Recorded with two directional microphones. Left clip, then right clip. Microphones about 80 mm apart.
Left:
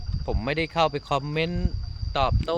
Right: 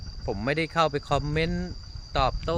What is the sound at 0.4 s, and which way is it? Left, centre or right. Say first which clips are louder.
Speech: left 1 dB; right.